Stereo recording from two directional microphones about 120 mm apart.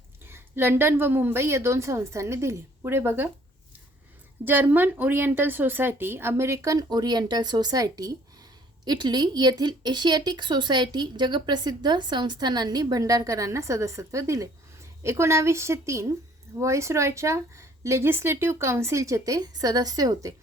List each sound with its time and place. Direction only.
0.3 s speech: 20° right (ahead or behind)
4.4 s speech: 15° right (ahead or behind)